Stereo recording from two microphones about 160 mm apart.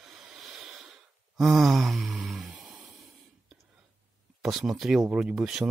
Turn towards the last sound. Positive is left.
turn(degrees=-5)  # may be behind; listen again after turning